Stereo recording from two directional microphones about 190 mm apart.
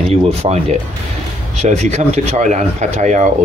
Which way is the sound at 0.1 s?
35° right (ahead or behind).